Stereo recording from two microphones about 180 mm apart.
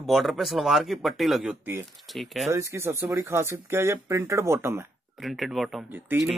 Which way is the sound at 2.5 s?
15° right (ahead or behind).